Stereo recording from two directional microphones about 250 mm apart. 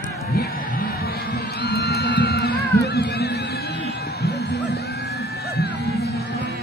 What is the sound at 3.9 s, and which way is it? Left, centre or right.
Music, left.